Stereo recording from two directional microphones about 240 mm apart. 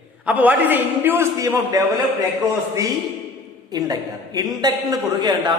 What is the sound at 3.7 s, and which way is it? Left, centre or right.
A man's voice, centre.